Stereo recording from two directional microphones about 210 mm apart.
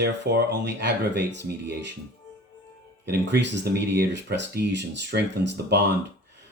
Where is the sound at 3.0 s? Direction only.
50° right (ahead or behind).